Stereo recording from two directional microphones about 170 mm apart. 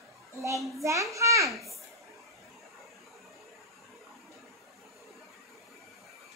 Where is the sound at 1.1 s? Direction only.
20° right (ahead or behind).